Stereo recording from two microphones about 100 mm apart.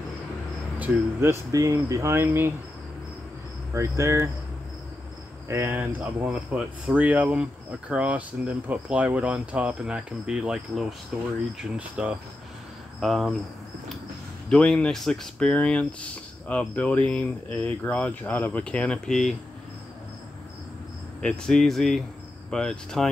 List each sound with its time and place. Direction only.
0.7 s speech: 25° right (ahead or behind)
3.7 s speech: 30° right (ahead or behind)
5.5 s speech: 20° right (ahead or behind)
13.0 s speech: centre (ahead or behind)
14.5 s speech: 10° left (ahead or behind)
21.2 s speech: 5° left (ahead or behind)